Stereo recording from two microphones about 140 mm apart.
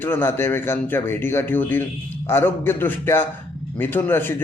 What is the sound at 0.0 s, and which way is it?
A man's voice, 15° left (ahead or behind).